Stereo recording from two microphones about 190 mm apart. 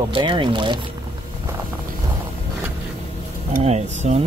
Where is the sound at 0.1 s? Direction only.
25° right (ahead or behind).